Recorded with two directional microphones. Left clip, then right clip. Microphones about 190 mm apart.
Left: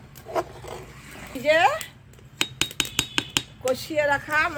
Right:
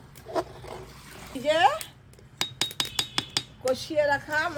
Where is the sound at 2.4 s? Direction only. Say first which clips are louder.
Left 3 dB; 15° right (ahead or behind).